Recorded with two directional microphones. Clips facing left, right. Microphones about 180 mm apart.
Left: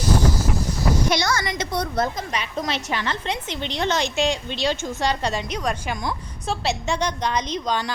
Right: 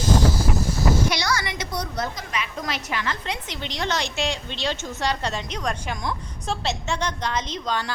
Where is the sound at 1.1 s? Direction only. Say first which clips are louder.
Left 3 dB; 50° left (ahead or behind).